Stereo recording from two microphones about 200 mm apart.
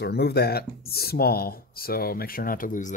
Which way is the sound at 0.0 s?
55° left (ahead or behind).